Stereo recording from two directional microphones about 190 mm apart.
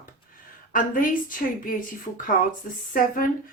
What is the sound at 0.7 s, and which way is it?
Speech, 45° left (ahead or behind).